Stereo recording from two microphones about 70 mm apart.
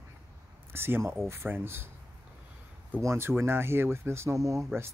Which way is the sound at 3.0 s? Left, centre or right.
Right.